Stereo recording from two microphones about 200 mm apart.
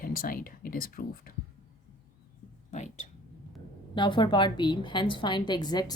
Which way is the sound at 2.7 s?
35° left (ahead or behind).